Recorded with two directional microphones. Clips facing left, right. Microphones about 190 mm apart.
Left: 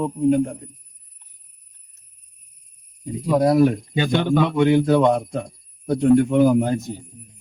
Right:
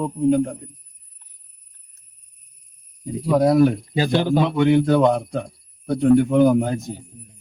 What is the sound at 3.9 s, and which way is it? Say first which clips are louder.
Speech: right 1 dB; 35° right (ahead or behind).